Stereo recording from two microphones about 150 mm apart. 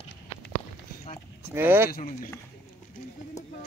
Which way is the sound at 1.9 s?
65° left (ahead or behind).